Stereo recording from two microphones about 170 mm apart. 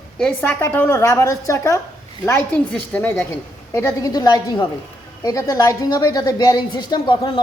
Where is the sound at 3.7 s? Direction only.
20° left (ahead or behind).